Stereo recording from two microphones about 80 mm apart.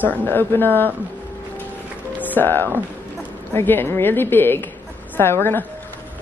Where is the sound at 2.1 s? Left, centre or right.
Left.